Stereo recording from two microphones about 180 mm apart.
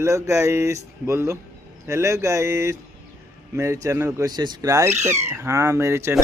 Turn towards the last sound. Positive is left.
turn(degrees=-15)  # may be behind; listen again after turning